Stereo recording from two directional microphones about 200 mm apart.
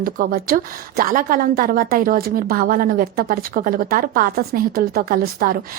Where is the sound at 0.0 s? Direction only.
45° right (ahead or behind).